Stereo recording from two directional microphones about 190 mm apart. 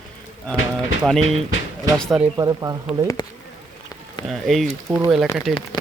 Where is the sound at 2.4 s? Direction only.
20° right (ahead or behind).